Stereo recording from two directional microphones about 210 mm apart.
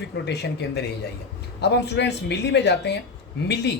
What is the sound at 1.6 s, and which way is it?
Speech, 55° left (ahead or behind).